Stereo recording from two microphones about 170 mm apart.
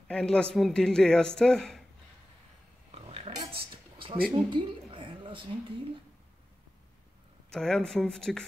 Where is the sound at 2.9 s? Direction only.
35° right (ahead or behind).